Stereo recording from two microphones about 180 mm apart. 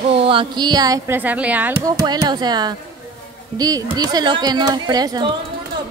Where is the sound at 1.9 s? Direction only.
20° right (ahead or behind).